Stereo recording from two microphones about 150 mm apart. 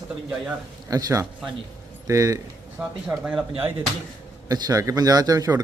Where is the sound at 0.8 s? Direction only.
25° right (ahead or behind).